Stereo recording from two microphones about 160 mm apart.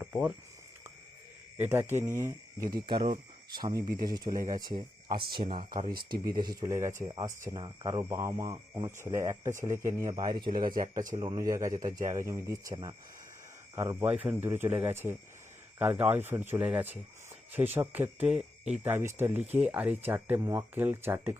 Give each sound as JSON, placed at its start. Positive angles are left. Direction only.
{"t": 0.0, "sound": "speech", "side_deg": -5}
{"t": 1.5, "sound": "speech", "side_deg": -15}
{"t": 3.8, "sound": "speech", "side_deg": -65}
{"t": 4.1, "sound": "speech", "side_deg": -25}
{"t": 5.9, "sound": "speech", "side_deg": -65}
{"t": 6.3, "sound": "speech", "side_deg": -25}
{"t": 13.7, "sound": "speech", "side_deg": -15}
{"t": 18.8, "sound": "speech", "side_deg": -15}